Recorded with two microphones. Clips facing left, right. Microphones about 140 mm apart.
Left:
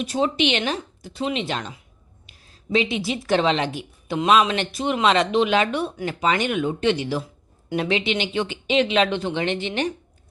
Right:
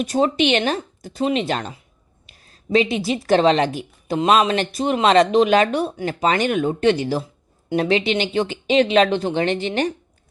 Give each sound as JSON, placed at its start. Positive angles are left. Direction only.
{"t": 0.0, "sound": "a woman's voice", "side_deg": -45}